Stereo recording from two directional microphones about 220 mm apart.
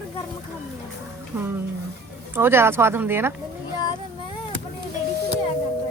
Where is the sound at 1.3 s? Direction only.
10° right (ahead or behind).